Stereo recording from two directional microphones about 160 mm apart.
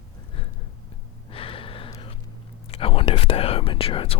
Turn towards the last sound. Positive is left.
turn(degrees=35)  # may be behind; listen again after turning